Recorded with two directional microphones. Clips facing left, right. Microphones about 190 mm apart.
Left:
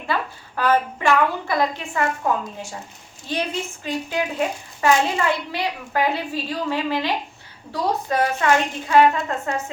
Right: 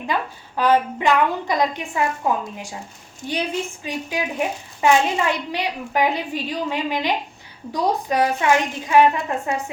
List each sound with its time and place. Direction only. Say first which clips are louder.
0.1 s a woman's voice: even; 15° right (ahead or behind)